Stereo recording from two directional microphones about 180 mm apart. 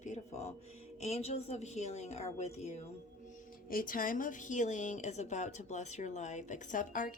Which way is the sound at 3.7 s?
50° left (ahead or behind).